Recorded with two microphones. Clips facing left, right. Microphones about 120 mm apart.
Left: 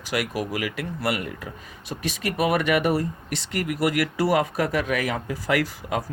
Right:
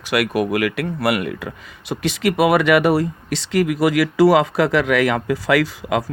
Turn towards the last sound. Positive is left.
turn(degrees=-90)